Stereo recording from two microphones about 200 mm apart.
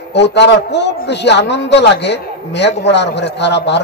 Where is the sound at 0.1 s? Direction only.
60° left (ahead or behind).